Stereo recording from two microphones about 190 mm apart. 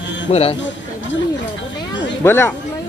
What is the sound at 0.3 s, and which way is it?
Speech, 35° left (ahead or behind).